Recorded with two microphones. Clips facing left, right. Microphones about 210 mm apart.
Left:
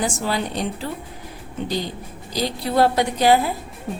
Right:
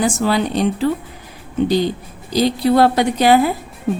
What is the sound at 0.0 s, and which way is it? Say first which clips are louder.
Speech: right 7 dB; 80° right.